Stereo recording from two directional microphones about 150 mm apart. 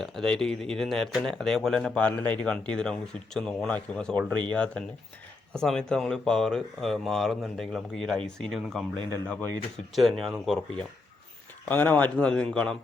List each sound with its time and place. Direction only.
0.0 s a man's voice: 5° left (ahead or behind)
9.9 s speech: centre (ahead or behind)
11.7 s a man's voice: 10° left (ahead or behind)